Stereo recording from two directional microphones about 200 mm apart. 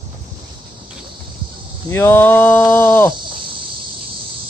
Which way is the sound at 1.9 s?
10° left (ahead or behind).